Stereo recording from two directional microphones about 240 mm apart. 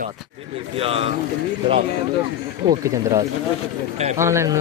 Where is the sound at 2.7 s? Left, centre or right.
Centre.